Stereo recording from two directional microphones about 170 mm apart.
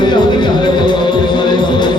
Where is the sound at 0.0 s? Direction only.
25° left (ahead or behind).